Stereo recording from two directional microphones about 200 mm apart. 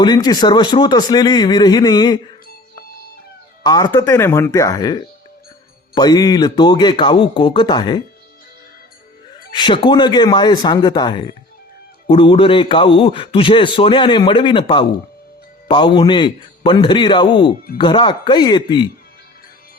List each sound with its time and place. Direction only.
0.0 s a man's voice: 20° left (ahead or behind)
3.6 s a man's voice: 20° left (ahead or behind)
9.6 s a man's voice: 25° left (ahead or behind)